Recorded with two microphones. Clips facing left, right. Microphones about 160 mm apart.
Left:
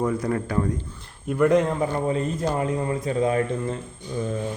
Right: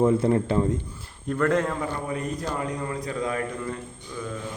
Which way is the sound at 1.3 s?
15° left (ahead or behind).